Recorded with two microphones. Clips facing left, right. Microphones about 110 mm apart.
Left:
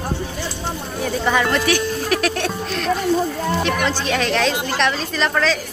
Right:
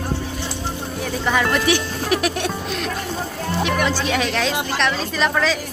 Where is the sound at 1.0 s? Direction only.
Centre (ahead or behind).